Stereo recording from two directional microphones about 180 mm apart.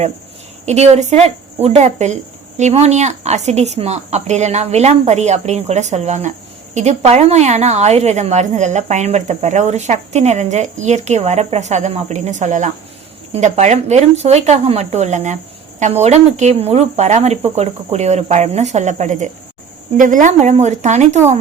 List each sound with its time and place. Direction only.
0.6 s a woman's voice: 40° right (ahead or behind)